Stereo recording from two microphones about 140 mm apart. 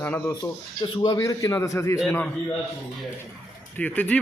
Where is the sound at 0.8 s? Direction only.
30° left (ahead or behind).